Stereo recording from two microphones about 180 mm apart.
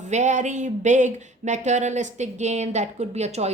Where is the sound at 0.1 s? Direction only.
40° right (ahead or behind).